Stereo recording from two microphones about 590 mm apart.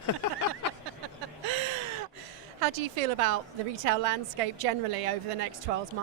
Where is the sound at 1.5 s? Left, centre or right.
Right.